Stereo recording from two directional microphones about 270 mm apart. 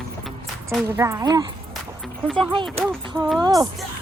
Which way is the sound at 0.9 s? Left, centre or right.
Centre.